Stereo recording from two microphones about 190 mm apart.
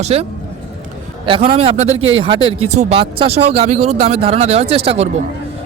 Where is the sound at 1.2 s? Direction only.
25° right (ahead or behind).